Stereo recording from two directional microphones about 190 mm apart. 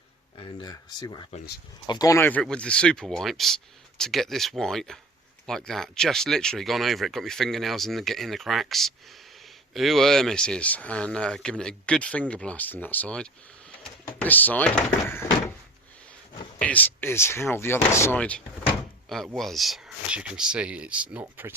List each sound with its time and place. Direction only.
0.3 s speech: 25° left (ahead or behind); by 14.8 s 10° left (ahead or behind)
16.6 s speech: 10° left (ahead or behind); by 21.5 s 10° right (ahead or behind)